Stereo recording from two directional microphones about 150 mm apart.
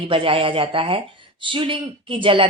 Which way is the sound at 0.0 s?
35° right (ahead or behind).